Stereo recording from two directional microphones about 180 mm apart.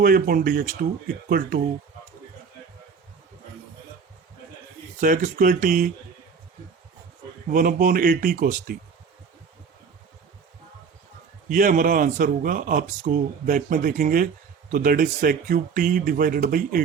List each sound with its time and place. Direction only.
0.0 s speech: 55° right (ahead or behind)
4.9 s speech: 45° right (ahead or behind)
7.5 s speech: 50° right (ahead or behind)
11.4 s speech: 50° right (ahead or behind)